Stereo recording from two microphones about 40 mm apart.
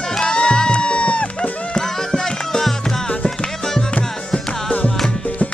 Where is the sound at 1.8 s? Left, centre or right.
Centre.